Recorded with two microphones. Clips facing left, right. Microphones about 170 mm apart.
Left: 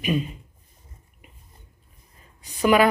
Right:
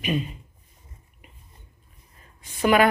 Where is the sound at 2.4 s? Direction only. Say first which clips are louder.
Right 1 dB; 40° left (ahead or behind).